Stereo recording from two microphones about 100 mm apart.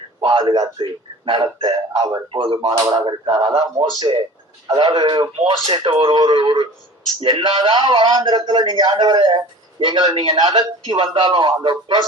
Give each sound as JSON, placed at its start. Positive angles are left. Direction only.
{"t": 0.2, "sound": "a man's voice", "side_deg": -50}
{"t": 2.3, "sound": "speech", "side_deg": -55}
{"t": 2.7, "sound": "a man's voice", "side_deg": -40}